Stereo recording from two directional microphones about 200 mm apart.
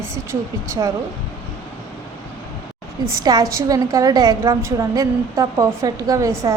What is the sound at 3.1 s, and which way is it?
A woman's voice, 20° right (ahead or behind).